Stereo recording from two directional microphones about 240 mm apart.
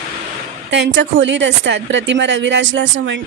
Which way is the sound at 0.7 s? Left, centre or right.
Right.